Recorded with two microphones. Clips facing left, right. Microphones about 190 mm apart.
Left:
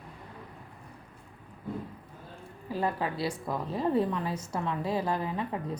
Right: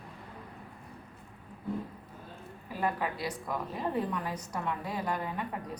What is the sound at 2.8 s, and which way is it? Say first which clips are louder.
A woman's voice: left 2 dB; 30° left (ahead or behind).